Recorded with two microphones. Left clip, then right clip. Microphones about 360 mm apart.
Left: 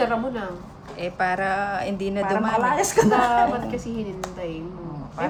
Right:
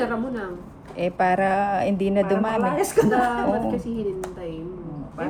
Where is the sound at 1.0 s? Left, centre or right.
Centre.